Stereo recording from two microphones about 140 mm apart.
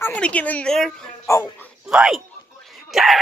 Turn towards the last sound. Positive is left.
turn(degrees=0)  # may be behind; listen again after turning